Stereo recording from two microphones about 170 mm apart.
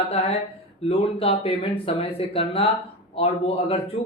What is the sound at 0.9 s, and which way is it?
Speech, 35° left (ahead or behind).